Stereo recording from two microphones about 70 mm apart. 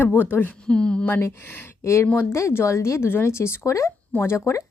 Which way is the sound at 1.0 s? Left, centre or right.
Left.